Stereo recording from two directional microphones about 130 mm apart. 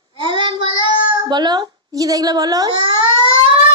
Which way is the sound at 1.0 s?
35° right (ahead or behind).